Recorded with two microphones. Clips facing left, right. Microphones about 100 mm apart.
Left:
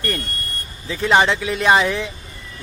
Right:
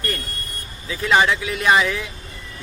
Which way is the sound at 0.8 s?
30° left (ahead or behind).